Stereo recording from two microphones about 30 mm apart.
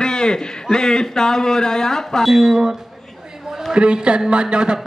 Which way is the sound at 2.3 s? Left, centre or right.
Centre.